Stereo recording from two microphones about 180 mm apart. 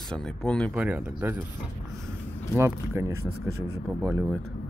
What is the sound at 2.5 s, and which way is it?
Speech, 15° right (ahead or behind).